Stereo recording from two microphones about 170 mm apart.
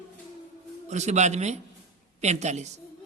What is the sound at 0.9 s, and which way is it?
A man's voice, 40° right (ahead or behind).